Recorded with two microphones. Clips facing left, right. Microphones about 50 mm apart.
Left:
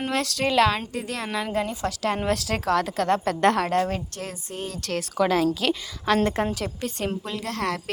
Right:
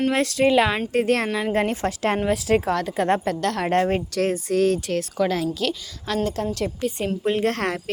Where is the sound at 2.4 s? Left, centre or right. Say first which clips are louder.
Right 3 dB; centre.